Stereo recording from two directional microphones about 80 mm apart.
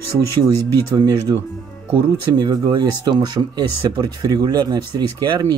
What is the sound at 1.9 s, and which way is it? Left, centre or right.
Speech, right.